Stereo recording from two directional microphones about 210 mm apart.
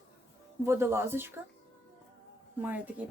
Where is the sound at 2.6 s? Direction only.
5° right (ahead or behind).